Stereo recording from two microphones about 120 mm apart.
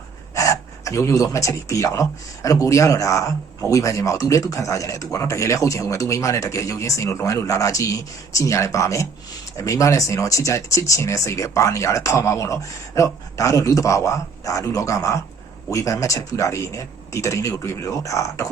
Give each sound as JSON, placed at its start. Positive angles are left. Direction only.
{"t": 0.3, "sound": "speech", "side_deg": 25}